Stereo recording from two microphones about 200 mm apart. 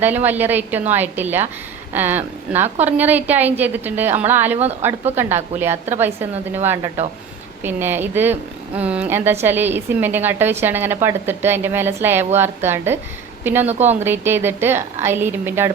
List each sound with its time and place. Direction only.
0.3 s a woman's voice: 10° right (ahead or behind)
13.7 s speech: 35° right (ahead or behind)
14.0 s a woman's voice: 10° right (ahead or behind)